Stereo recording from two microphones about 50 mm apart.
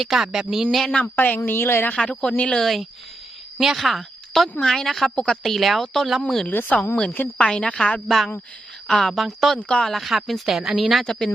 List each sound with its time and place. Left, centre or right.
0.0 s speech: centre
0.9 s a woman's voice: left
1.1 s a woman's voice: left
1.5 s a woman's voice: left
1.9 s a woman's voice: left
2.6 s a woman's voice: centre
5.0 s a woman's voice: centre
5.8 s a woman's voice: centre
6.7 s a woman's voice: left
7.4 s a woman's voice: centre
8.0 s speech: centre
9.6 s a woman's voice: left
9.8 s speech: centre
11.0 s a woman's voice: centre